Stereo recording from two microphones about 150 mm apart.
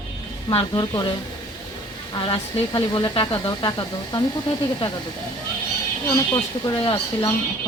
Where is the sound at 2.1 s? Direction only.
30° left (ahead or behind).